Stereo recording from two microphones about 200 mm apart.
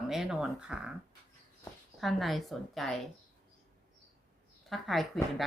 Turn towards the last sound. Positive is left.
turn(degrees=0)  # may be behind; listen again after turning